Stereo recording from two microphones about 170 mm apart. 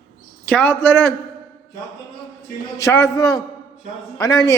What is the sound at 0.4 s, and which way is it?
Speech, 10° left (ahead or behind).